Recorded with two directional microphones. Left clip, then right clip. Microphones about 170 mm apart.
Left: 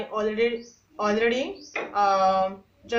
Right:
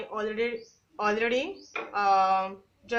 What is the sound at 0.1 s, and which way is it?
Speech, 40° right (ahead or behind).